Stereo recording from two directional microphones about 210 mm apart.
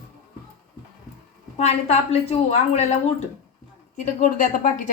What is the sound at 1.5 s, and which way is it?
A woman's voice, 30° left (ahead or behind).